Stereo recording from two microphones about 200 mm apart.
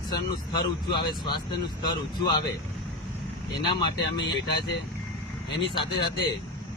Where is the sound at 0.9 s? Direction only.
25° left (ahead or behind).